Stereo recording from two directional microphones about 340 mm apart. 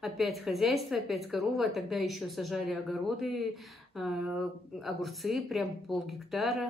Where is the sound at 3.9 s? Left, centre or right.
Centre.